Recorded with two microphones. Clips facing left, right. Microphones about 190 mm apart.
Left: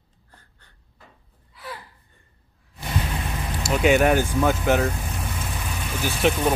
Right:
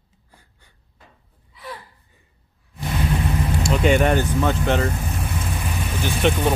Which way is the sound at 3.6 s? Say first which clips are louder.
Even; 5° left (ahead or behind).